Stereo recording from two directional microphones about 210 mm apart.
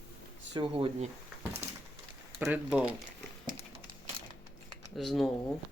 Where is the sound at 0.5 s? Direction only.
25° right (ahead or behind).